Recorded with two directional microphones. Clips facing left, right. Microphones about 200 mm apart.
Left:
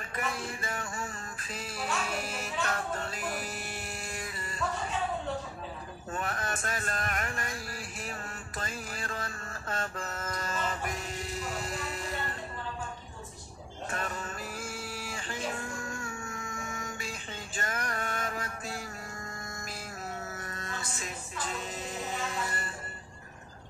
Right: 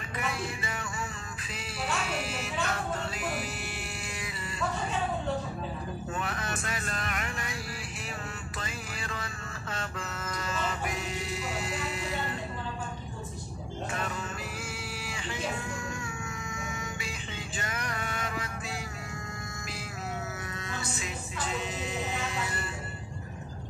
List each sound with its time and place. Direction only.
0.1 s music: 45° left (ahead or behind)
6.1 s a sound: 45° left (ahead or behind)
8.5 s music: 45° left (ahead or behind)
14.6 s a sound: 45° left (ahead or behind)
15.9 s music: 50° left (ahead or behind)
20.5 s music: 45° left (ahead or behind)